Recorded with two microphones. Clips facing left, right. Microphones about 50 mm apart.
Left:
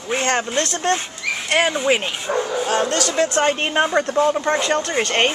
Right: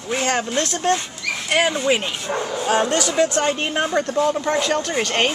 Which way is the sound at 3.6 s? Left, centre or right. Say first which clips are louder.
Left 2 dB; left.